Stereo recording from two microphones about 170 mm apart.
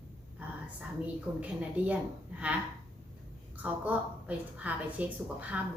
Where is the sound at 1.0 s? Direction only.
10° right (ahead or behind).